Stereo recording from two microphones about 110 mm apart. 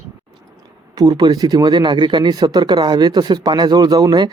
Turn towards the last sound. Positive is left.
turn(degrees=-40)  # may be behind; listen again after turning